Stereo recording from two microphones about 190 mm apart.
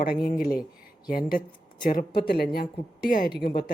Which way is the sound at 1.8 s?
50° left (ahead or behind).